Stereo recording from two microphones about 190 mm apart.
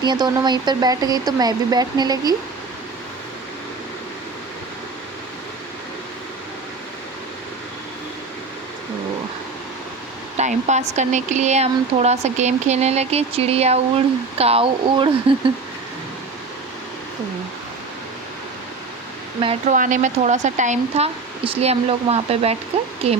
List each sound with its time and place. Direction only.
0.0 s speech: 20° right (ahead or behind)
10.3 s speech: 40° right (ahead or behind)
19.7 s speech: 40° right (ahead or behind)